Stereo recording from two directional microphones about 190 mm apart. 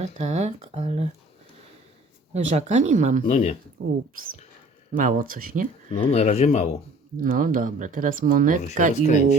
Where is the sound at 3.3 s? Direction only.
35° left (ahead or behind).